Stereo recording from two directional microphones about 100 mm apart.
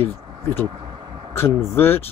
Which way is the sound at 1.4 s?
25° left (ahead or behind).